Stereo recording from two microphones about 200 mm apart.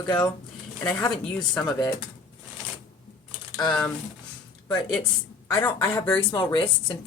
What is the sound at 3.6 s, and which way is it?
A woman's voice, 5° left (ahead or behind).